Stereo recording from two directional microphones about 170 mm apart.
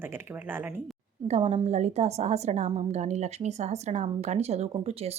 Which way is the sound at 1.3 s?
40° right (ahead or behind).